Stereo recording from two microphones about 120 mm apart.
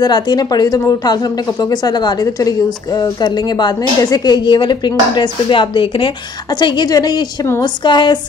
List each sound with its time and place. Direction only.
0.0 s speech: 35° left (ahead or behind)